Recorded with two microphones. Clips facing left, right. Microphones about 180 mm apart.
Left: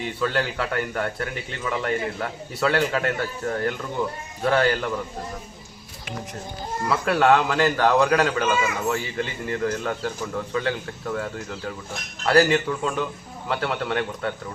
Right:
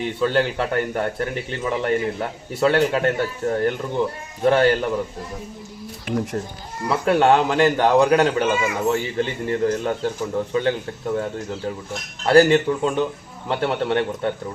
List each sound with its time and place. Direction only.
0.2 s a man's voice: 25° right (ahead or behind)
6.8 s a man's voice: 25° right (ahead or behind)